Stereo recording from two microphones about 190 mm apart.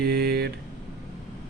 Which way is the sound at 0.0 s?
55° right (ahead or behind).